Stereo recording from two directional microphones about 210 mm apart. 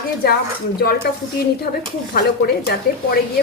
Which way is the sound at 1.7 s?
40° left (ahead or behind).